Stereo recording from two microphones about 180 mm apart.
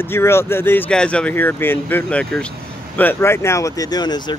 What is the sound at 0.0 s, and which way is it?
Speech, 15° left (ahead or behind).